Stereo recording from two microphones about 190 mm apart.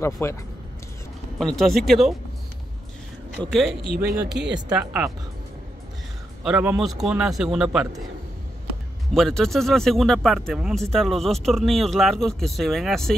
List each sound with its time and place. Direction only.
0.0 s speech: 15° left (ahead or behind)
1.4 s speech: 5° left (ahead or behind)
3.3 s speech: centre (ahead or behind)
3.8 s speech: 55° right (ahead or behind)
4.7 s speech: 5° right (ahead or behind)
6.4 s speech: 10° right (ahead or behind)
9.1 s speech: centre (ahead or behind)